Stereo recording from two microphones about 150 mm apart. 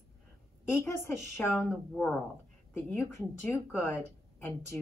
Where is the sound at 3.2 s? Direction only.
15° left (ahead or behind).